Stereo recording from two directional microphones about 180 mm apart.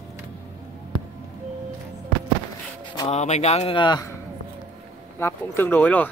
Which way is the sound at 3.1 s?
40° left (ahead or behind).